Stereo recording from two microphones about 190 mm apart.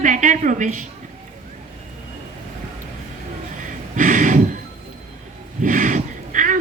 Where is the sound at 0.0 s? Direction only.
45° right (ahead or behind).